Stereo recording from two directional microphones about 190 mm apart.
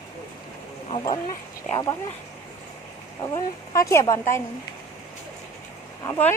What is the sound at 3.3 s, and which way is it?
Speech, 15° left (ahead or behind).